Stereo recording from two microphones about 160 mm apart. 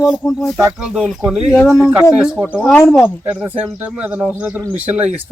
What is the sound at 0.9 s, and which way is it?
Speech, 5° right (ahead or behind).